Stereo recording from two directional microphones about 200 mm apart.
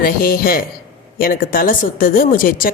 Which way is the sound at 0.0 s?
50° left (ahead or behind).